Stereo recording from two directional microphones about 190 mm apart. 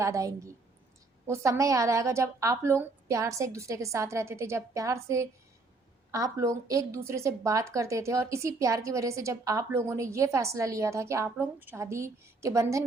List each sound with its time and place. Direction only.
0.0 s a woman's voice: 15° right (ahead or behind)